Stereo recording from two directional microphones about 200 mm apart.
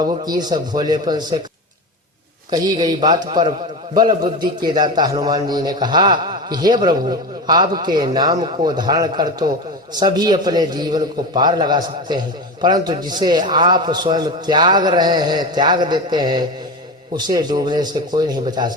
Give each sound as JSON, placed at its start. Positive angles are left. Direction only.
{"t": 0.0, "sound": "a man's voice", "side_deg": -20}
{"t": 2.5, "sound": "a man's voice", "side_deg": -20}